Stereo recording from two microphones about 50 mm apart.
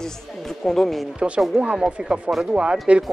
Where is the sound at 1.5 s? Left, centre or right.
Centre.